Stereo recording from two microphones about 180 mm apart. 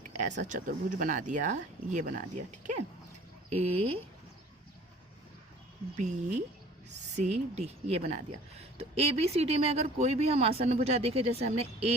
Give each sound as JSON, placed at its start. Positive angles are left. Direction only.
{"t": 0.1, "sound": "a sound", "side_deg": -40}
{"t": 0.4, "sound": "a woman's voice", "side_deg": -45}
{"t": 6.0, "sound": "a woman's voice", "side_deg": -40}